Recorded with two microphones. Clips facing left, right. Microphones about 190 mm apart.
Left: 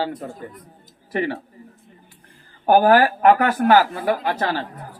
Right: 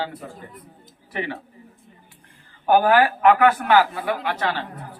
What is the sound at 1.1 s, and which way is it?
Speech, 40° left (ahead or behind).